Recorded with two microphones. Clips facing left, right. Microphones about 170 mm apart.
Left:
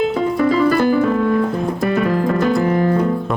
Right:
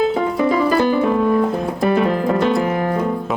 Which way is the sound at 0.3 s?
20° right (ahead or behind).